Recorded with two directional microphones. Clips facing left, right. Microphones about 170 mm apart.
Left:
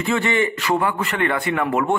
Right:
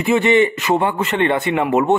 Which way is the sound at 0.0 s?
20° right (ahead or behind).